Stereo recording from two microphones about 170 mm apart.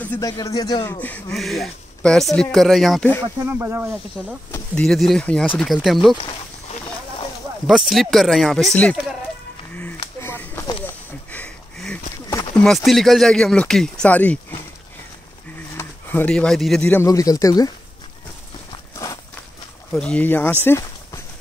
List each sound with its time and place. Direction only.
0.2 s speech: 20° left (ahead or behind)
1.3 s speech: centre (ahead or behind)
3.4 s speech: 15° right (ahead or behind)
4.5 s speech: 5° left (ahead or behind)
6.2 s a sound: 30° left (ahead or behind)
7.6 s speech: centre (ahead or behind)
9.8 s a sound: 10° left (ahead or behind)
10.9 s sniff: 10° left (ahead or behind)
12.3 s a sound: 15° left (ahead or behind)
12.6 s speech: centre (ahead or behind)
15.7 s speech: 15° left (ahead or behind)
18.7 s walk: 20° left (ahead or behind)
19.9 s speech: 5° left (ahead or behind)
20.6 s a sound: 15° left (ahead or behind)